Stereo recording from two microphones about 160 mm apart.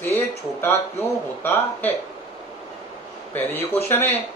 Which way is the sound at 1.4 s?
15° left (ahead or behind).